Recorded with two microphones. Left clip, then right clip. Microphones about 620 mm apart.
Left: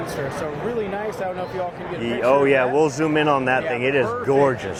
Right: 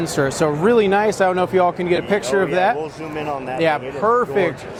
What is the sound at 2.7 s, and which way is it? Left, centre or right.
Speech, left.